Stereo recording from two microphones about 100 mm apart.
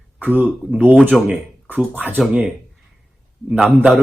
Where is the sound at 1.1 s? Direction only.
Centre (ahead or behind).